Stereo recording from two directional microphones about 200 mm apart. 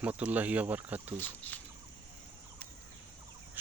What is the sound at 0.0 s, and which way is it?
Speech, 5° right (ahead or behind).